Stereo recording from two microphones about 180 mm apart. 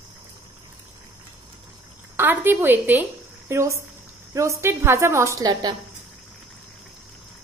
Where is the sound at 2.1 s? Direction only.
10° right (ahead or behind).